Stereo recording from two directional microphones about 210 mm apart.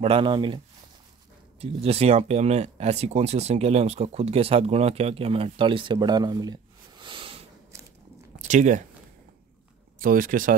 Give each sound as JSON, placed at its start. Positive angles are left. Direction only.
{"t": 0.0, "sound": "speech", "side_deg": -25}
{"t": 1.6, "sound": "speech", "side_deg": -30}
{"t": 8.4, "sound": "speech", "side_deg": -35}
{"t": 9.9, "sound": "speech", "side_deg": -40}